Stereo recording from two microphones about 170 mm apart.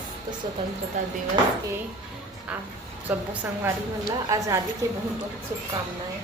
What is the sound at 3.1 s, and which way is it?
Speech, 10° right (ahead or behind).